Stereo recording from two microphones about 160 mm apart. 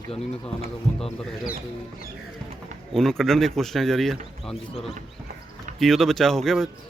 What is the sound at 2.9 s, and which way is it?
A man's voice, centre (ahead or behind).